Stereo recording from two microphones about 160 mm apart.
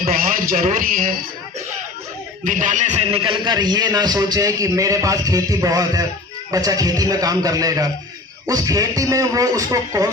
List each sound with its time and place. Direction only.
0.0 s a man's voice: 60° right (ahead or behind)
2.4 s a man's voice: 55° right (ahead or behind); by 10.1 s 20° right (ahead or behind)